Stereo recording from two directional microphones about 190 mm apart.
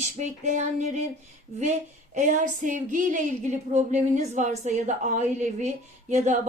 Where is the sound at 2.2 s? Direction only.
40° right (ahead or behind).